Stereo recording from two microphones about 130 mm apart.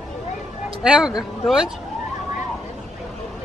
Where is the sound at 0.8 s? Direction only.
5° right (ahead or behind).